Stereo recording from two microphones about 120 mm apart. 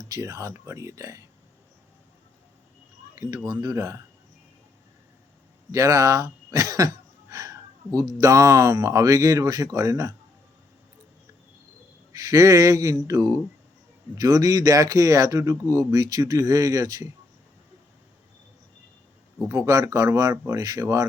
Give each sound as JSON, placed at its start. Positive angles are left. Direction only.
{"t": 0.0, "sound": "speech", "side_deg": -30}
{"t": 3.2, "sound": "speech", "side_deg": -30}
{"t": 5.7, "sound": "a sound", "side_deg": -25}
{"t": 7.9, "sound": "speech", "side_deg": -30}
{"t": 12.1, "sound": "speech", "side_deg": -30}
{"t": 19.5, "sound": "speech", "side_deg": -25}